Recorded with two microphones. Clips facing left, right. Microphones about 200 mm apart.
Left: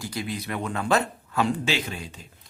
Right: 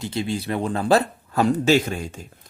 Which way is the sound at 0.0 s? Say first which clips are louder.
Right 6 dB; 25° right (ahead or behind).